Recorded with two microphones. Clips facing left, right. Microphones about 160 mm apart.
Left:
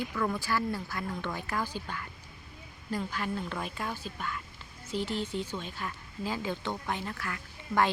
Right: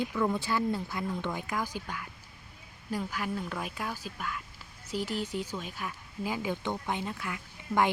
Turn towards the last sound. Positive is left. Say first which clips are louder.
# even
turn(degrees=-15)  # may be behind; listen again after turning